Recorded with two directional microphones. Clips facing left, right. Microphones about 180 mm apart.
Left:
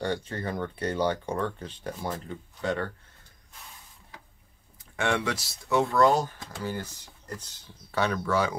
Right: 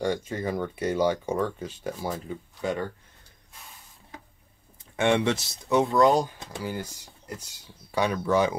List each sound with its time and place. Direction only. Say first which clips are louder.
0.0 s speech: right 3 dB; 10° right (ahead or behind)
4.9 s speech: right 5 dB; 20° right (ahead or behind)